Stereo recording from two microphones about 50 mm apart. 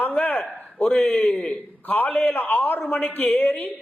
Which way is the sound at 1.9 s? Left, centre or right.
Left.